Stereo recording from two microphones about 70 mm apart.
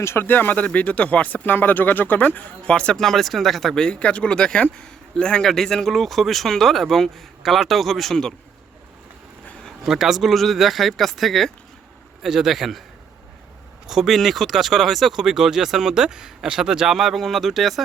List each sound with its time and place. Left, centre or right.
0.0 s speech: left
0.3 s speech: left; by 8.3 s centre
9.8 s speech: centre
13.8 s speech: centre